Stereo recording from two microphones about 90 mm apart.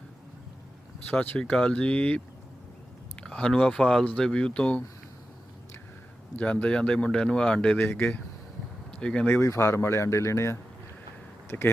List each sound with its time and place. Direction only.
1.2 s speech: 15° left (ahead or behind)
6.3 s speech: 15° left (ahead or behind)
7.9 s speech: 25° left (ahead or behind)
8.9 s a sound: 10° left (ahead or behind)
9.4 s speech: 35° left (ahead or behind)